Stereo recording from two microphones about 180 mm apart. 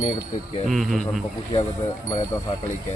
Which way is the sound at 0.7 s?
Centre (ahead or behind).